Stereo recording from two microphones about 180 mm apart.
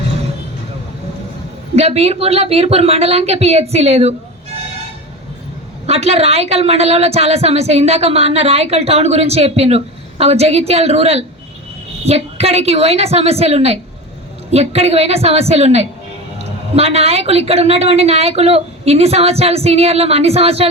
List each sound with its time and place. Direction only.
1.7 s a woman's voice: 35° right (ahead or behind)
5.8 s a woman's voice: 35° right (ahead or behind)